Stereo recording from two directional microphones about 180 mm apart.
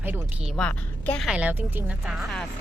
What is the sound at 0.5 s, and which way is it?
A woman's voice, 5° left (ahead or behind).